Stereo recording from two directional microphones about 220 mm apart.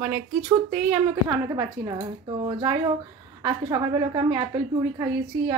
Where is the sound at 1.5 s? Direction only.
20° right (ahead or behind).